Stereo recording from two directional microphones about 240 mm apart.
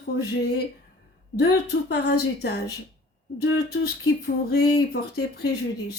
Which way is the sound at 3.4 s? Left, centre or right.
Left.